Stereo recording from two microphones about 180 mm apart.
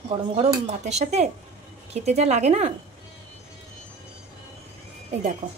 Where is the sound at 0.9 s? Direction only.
40° right (ahead or behind).